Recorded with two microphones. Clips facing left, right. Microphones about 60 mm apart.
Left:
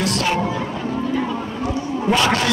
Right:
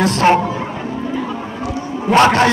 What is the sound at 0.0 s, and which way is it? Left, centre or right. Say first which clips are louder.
Speech: right 8 dB; right.